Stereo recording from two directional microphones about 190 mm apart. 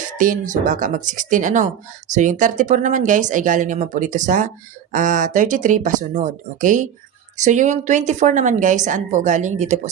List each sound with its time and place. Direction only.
0.2 s speech: 45° right (ahead or behind)